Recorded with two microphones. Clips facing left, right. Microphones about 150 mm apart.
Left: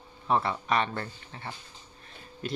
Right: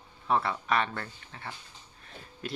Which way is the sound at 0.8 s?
25° left (ahead or behind).